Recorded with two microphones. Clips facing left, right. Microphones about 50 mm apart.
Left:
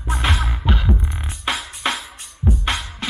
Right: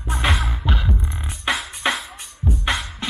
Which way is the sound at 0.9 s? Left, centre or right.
Centre.